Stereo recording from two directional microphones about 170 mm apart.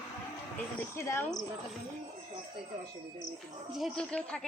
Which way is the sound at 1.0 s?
15° left (ahead or behind).